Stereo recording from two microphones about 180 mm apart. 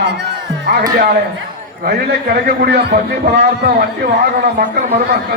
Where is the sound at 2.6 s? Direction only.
65° right (ahead or behind).